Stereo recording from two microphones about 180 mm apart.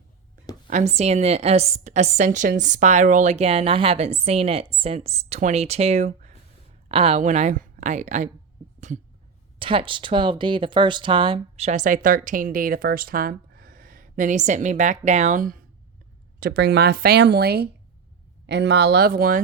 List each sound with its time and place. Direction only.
0.7 s a woman's voice: 40° right (ahead or behind)
9.6 s speech: 30° right (ahead or behind); by 15.6 s 50° right (ahead or behind)
16.4 s speech: 65° right (ahead or behind)
18.4 s speech: 75° right (ahead or behind); by 19.4 s 55° right (ahead or behind)